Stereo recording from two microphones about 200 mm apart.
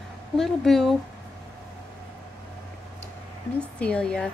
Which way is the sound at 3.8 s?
5° left (ahead or behind).